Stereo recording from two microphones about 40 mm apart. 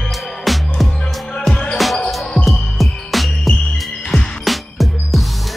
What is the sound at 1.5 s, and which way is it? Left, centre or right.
Music, left.